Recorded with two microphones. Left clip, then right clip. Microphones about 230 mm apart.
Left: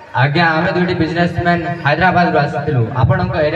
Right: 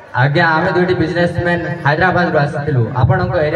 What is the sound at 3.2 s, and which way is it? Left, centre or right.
Speech, centre.